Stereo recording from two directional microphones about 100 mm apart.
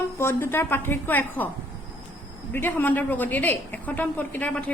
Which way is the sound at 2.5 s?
20° left (ahead or behind).